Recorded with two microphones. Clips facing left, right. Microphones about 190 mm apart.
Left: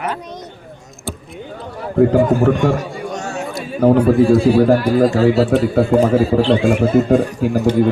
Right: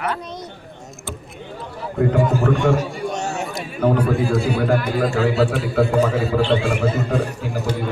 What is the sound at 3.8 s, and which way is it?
A man's voice, 30° left (ahead or behind).